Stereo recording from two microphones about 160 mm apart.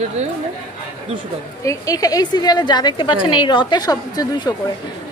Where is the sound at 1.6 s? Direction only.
20° left (ahead or behind).